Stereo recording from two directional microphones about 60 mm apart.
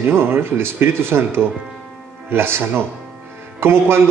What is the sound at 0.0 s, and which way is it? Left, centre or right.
Speech, right.